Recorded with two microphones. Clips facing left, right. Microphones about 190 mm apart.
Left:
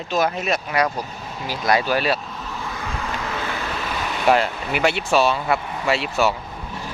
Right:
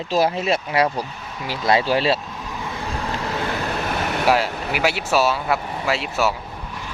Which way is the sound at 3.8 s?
60° right (ahead or behind).